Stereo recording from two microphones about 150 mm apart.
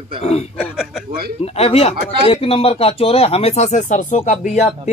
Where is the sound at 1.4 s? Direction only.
40° left (ahead or behind).